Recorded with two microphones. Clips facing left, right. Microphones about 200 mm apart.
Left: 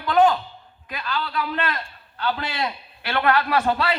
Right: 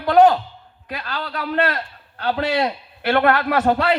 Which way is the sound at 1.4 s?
75° right (ahead or behind).